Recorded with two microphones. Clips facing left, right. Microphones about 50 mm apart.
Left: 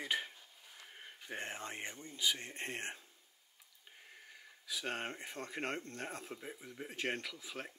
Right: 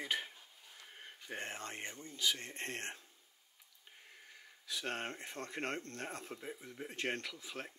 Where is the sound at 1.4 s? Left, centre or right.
Centre.